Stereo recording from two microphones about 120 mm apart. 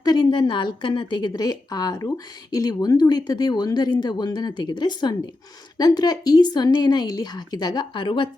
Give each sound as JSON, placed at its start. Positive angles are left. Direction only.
{"t": 0.0, "sound": "a woman's voice", "side_deg": 35}